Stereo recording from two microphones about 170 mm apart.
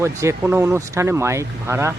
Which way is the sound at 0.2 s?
15° right (ahead or behind).